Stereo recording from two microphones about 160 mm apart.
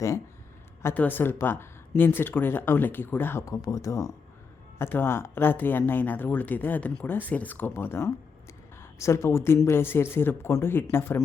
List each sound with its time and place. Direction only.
0.8 s speech: 15° left (ahead or behind)